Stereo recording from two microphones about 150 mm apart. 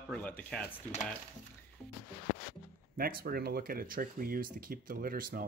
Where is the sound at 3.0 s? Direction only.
85° right.